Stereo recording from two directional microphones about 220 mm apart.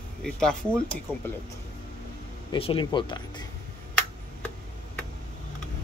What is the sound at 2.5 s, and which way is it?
Speech, 25° left (ahead or behind).